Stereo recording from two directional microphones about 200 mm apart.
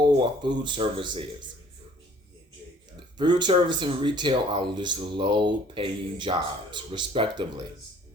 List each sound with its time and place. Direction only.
0.0 s speech: 25° right (ahead or behind)
3.2 s speech: 20° right (ahead or behind)